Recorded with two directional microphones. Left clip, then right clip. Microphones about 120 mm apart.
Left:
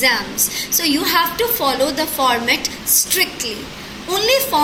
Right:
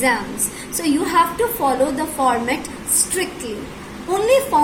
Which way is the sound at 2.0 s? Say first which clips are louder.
Left 2 dB; 45° right (ahead or behind).